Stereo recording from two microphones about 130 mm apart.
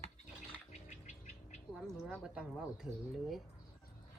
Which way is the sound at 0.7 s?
65° left (ahead or behind).